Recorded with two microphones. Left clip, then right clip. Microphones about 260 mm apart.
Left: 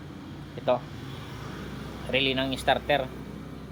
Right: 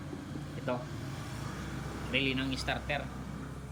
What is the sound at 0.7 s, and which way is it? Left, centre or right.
Speech, centre.